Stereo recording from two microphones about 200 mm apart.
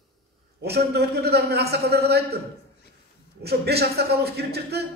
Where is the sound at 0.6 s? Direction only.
55° right (ahead or behind).